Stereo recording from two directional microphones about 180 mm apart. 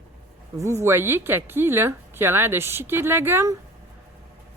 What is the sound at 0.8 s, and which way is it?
A woman's voice, 15° right (ahead or behind).